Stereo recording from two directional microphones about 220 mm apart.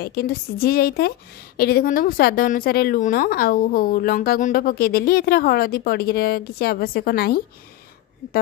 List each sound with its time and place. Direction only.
0.0 s a woman's voice: 45° left (ahead or behind)